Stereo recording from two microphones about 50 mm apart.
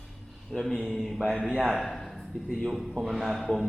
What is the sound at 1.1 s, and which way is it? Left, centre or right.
Speech, right.